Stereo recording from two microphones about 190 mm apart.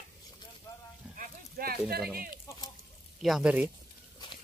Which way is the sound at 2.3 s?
20° left (ahead or behind).